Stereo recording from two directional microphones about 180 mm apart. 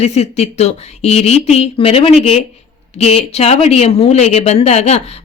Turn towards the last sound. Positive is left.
turn(degrees=35)  # may be behind; listen again after turning